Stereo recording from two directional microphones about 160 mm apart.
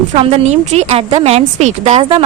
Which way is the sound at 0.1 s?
40° right (ahead or behind).